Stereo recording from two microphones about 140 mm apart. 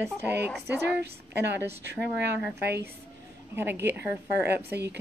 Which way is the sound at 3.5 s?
15° right (ahead or behind).